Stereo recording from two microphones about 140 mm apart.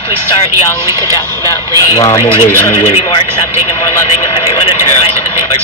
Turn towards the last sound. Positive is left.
turn(degrees=35)  # may be behind; listen again after turning